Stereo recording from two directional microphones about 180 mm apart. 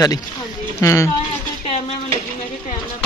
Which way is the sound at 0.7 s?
15° left (ahead or behind).